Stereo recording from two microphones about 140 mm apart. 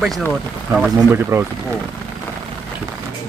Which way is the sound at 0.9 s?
20° right (ahead or behind).